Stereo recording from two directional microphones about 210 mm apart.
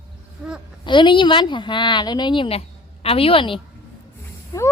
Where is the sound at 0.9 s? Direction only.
20° left (ahead or behind).